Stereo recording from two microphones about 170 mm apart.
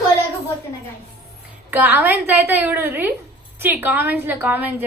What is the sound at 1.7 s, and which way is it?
A woman's voice, 10° right (ahead or behind).